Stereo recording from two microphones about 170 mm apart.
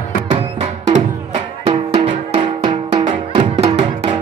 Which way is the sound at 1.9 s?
35° right (ahead or behind).